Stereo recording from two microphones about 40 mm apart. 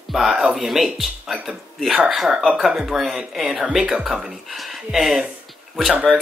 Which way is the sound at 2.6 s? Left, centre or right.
Centre.